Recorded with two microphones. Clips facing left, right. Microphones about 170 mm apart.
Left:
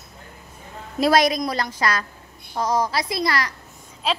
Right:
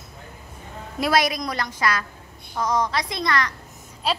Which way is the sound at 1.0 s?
40° left (ahead or behind).